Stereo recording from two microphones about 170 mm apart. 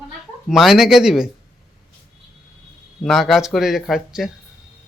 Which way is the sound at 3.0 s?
Centre (ahead or behind).